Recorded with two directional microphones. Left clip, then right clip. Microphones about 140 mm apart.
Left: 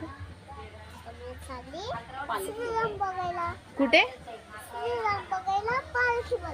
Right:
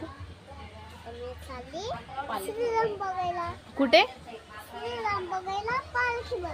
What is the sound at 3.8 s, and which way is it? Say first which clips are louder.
Speech: right 1 dB; 35° right (ahead or behind).